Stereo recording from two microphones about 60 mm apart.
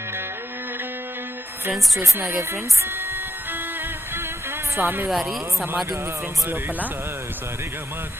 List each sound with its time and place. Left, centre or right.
2.0 s speech: right
4.8 s speech: right
5.1 s speech: centre